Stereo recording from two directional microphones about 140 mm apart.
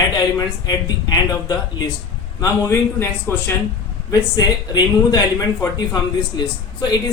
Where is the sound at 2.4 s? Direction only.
20° left (ahead or behind).